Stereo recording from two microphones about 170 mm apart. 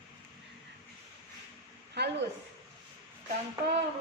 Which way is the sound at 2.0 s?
80° right.